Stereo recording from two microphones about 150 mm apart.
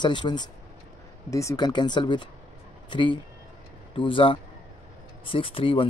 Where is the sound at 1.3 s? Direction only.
20° left (ahead or behind).